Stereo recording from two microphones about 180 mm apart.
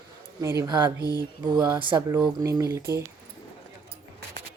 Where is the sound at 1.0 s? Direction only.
20° left (ahead or behind).